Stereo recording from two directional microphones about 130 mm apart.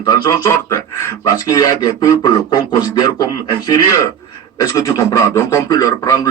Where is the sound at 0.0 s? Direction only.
30° left (ahead or behind).